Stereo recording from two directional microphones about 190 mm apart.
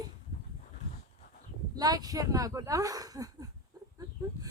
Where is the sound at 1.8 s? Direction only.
20° right (ahead or behind).